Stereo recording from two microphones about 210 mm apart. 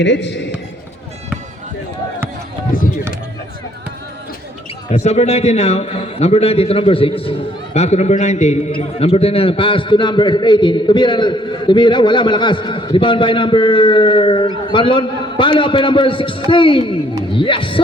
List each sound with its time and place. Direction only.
0.0 s a man's voice: 55° left (ahead or behind)
2.7 s a sound: 40° left (ahead or behind)
4.9 s a man's voice: 30° left (ahead or behind)